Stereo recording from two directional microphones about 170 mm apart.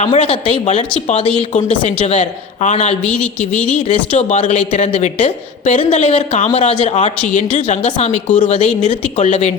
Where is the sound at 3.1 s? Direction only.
5° left (ahead or behind).